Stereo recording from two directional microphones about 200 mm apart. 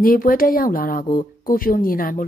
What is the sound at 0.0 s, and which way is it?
A woman's voice, 45° left (ahead or behind).